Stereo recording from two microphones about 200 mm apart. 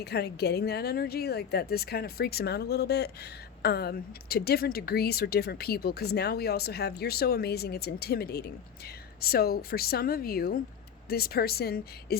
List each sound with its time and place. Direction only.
0.0 s speech: 55° left (ahead or behind)